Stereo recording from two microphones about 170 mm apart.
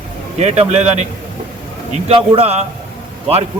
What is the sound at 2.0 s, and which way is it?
Speech, 35° right (ahead or behind).